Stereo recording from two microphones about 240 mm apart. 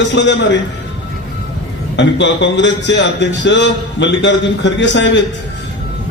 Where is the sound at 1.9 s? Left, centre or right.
Left.